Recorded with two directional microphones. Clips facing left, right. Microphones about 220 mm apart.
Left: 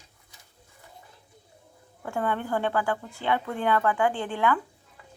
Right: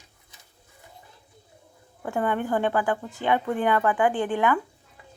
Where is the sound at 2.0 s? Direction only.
15° right (ahead or behind).